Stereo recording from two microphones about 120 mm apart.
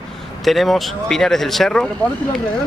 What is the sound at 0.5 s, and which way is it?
Speech, centre (ahead or behind).